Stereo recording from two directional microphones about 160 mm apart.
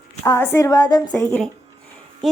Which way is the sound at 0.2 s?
15° left (ahead or behind).